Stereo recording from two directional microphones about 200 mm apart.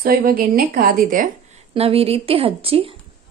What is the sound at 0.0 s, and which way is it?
Speech, 45° right (ahead or behind).